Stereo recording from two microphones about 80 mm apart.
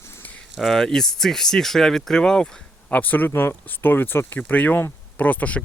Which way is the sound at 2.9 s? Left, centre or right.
Left.